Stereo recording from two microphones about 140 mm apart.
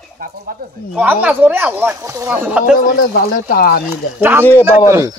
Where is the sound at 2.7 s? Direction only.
90° left.